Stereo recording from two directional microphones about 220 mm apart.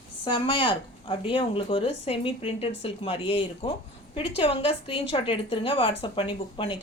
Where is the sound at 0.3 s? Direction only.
20° left (ahead or behind).